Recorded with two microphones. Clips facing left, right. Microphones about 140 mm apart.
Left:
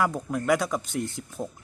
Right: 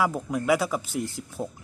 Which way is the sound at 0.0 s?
5° right (ahead or behind).